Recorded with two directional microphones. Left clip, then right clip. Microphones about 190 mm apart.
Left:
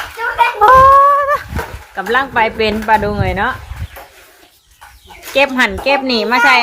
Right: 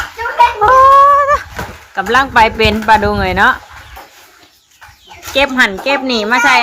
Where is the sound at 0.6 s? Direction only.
Centre (ahead or behind).